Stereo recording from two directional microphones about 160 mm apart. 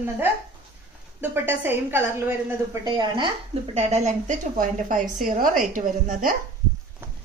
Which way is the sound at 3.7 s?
45° right (ahead or behind).